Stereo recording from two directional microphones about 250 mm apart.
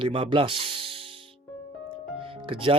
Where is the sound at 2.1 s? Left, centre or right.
Right.